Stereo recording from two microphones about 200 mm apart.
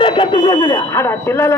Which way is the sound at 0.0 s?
25° left (ahead or behind).